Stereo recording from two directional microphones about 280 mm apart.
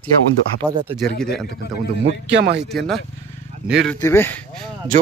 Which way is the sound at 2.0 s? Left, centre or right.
Right.